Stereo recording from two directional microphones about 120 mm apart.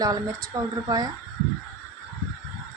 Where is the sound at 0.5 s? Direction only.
25° right (ahead or behind).